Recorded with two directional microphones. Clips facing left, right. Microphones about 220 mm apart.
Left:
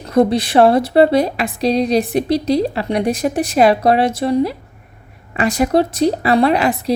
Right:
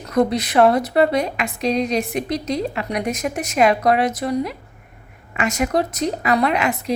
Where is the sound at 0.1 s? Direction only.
30° left (ahead or behind).